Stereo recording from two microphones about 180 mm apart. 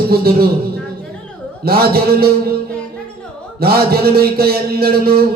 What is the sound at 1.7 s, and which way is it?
Speech, 60° right (ahead or behind).